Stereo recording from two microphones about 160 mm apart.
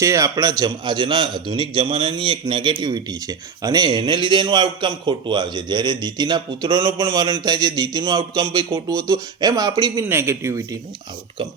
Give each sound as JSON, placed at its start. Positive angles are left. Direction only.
{"t": 0.0, "sound": "a man's voice", "side_deg": -20}